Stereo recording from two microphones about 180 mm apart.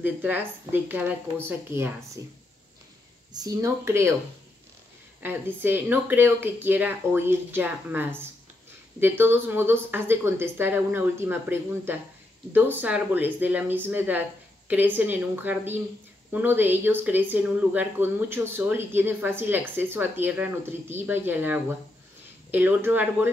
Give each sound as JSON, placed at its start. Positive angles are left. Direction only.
{"t": 0.0, "sound": "speech", "side_deg": -10}
{"t": 3.3, "sound": "speech", "side_deg": -20}
{"t": 5.2, "sound": "speech", "side_deg": -10}